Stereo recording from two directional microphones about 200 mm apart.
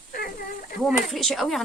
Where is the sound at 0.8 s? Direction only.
Centre (ahead or behind).